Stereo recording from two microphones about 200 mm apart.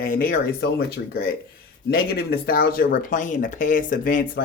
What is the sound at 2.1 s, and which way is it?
Speech, 50° left (ahead or behind).